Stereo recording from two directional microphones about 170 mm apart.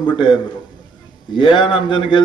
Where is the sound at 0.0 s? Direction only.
25° left (ahead or behind).